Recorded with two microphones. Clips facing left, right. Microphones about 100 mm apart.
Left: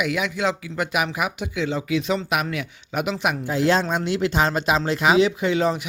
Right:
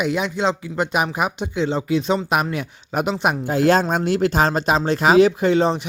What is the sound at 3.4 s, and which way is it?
Speech, 55° right (ahead or behind).